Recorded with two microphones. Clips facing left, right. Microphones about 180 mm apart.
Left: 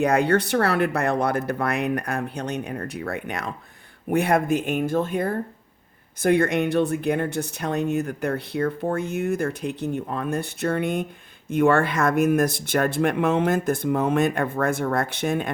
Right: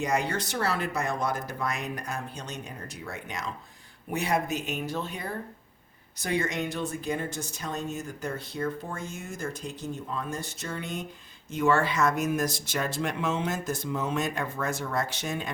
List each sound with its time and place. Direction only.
0.0 s speech: 60° left (ahead or behind)